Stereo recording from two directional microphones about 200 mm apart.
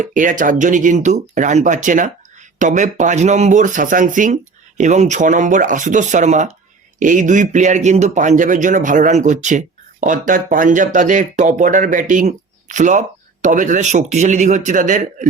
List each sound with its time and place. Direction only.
0.0 s speech: 40° right (ahead or behind)